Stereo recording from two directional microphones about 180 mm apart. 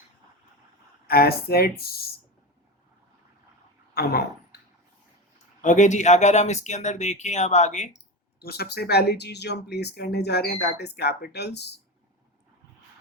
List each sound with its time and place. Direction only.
1.0 s speech: 60° left (ahead or behind)
5.6 s speech: 40° left (ahead or behind)
8.4 s speech: 60° left (ahead or behind)